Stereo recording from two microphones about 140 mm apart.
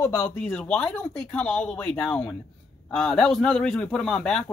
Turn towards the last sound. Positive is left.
turn(degrees=5)  # may be behind; listen again after turning